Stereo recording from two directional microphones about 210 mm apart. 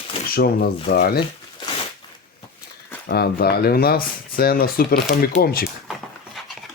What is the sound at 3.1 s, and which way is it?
Speech, 50° left (ahead or behind).